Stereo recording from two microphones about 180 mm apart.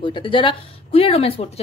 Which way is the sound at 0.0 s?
30° left (ahead or behind).